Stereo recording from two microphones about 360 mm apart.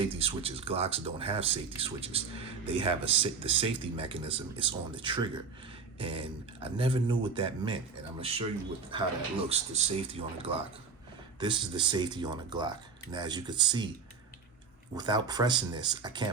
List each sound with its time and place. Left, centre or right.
0.0 s speech: centre
8.9 s speech: centre
14.9 s speech: centre